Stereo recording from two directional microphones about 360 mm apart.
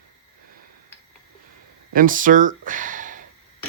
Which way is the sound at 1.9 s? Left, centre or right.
Right.